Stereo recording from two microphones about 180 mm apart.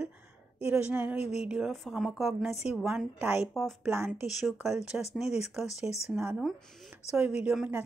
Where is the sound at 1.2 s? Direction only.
35° left (ahead or behind).